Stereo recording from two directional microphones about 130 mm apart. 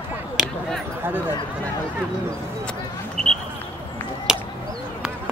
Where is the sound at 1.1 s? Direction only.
15° right (ahead or behind).